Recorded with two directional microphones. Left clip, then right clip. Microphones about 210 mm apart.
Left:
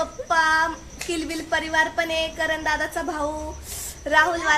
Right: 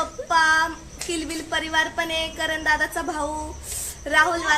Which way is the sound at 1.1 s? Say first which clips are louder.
Left 1 dB; 15° left (ahead or behind).